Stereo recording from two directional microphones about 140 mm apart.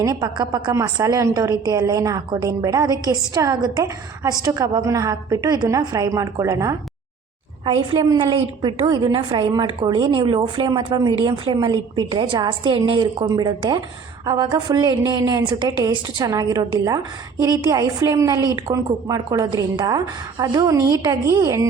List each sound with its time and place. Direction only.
0.0 s a woman's voice: 30° right (ahead or behind)
7.9 s a woman's voice: 35° right (ahead or behind)